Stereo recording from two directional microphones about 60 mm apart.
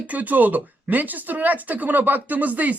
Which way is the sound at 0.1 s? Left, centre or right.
Right.